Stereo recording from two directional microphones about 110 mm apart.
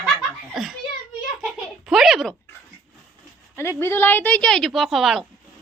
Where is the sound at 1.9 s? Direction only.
5° right (ahead or behind).